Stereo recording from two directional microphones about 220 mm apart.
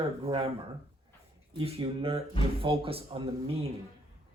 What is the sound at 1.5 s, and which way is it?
Speech, 25° right (ahead or behind).